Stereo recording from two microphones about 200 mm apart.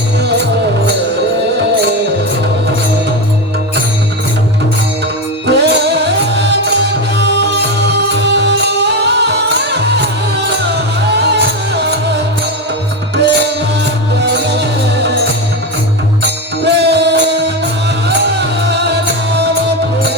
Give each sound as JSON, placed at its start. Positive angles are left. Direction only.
{"t": 0.2, "sound": "music", "side_deg": -55}
{"t": 5.5, "sound": "music", "side_deg": -55}
{"t": 13.2, "sound": "music", "side_deg": -55}
{"t": 16.2, "sound": "music", "side_deg": -60}